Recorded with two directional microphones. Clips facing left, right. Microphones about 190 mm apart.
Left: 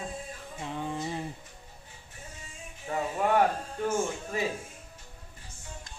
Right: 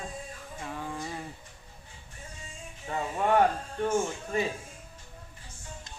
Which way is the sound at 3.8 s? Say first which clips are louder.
Right 1 dB; 5° left (ahead or behind).